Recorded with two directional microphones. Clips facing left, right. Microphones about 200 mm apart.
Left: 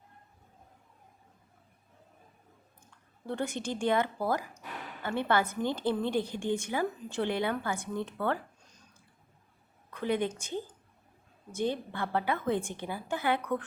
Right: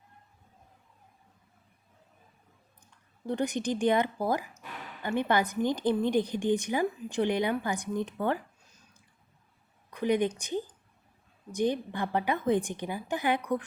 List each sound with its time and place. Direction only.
3.2 s a woman's voice: 15° right (ahead or behind)
9.9 s a woman's voice: 15° right (ahead or behind)